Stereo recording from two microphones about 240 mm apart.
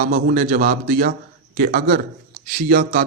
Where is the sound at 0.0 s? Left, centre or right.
Right.